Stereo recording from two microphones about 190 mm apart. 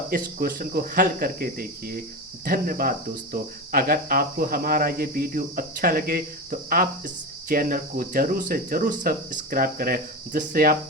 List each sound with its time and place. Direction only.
0.1 s speech: 50° right (ahead or behind)